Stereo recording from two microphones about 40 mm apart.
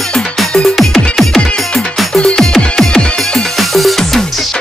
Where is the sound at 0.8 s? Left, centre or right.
Centre.